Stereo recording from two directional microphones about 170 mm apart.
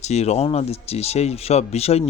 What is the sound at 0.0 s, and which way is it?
Speech, 40° left (ahead or behind).